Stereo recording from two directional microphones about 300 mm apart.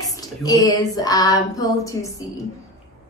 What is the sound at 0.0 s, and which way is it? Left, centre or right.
Female singing, centre.